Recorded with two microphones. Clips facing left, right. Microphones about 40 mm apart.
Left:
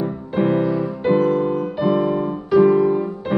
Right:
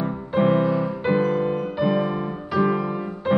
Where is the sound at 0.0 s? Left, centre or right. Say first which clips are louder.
Left 1 dB; centre.